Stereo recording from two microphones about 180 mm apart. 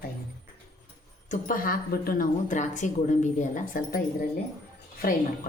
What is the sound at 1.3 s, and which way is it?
Speech, 50° left (ahead or behind).